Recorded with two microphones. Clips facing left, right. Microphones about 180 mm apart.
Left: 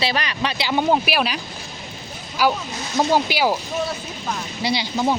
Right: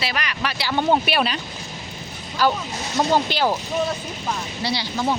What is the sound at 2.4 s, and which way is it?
Speech, 10° left (ahead or behind).